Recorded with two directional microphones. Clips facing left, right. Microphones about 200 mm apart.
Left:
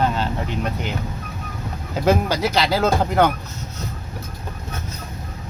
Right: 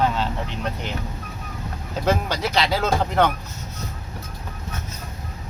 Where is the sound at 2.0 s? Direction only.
5° left (ahead or behind).